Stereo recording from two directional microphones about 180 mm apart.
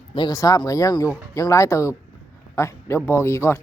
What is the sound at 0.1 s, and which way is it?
Speech, 25° left (ahead or behind).